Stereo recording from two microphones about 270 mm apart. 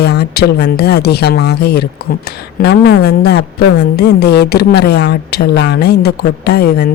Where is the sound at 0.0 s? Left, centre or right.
Left.